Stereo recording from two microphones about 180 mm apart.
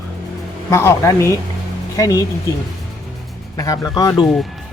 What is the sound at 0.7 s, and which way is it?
Speech, 15° left (ahead or behind).